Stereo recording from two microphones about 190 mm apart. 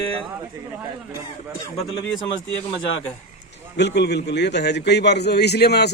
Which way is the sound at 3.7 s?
65° left (ahead or behind).